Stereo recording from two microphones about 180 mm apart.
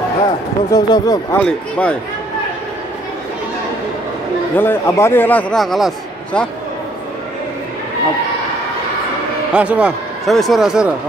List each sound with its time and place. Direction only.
0.7 s speech: 20° left (ahead or behind)
1.4 s a man's voice: 10° left (ahead or behind)
4.6 s a man's voice: 15° left (ahead or behind)
9.5 s a man's voice: 5° right (ahead or behind)